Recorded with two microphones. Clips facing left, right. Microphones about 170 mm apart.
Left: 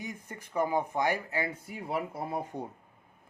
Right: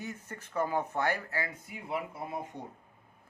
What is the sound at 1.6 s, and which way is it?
Speech, 35° left (ahead or behind).